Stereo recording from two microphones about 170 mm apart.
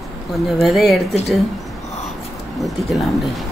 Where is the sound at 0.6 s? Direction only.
Centre (ahead or behind).